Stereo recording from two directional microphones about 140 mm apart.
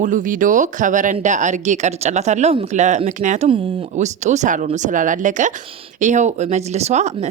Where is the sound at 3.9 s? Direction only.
55° right (ahead or behind).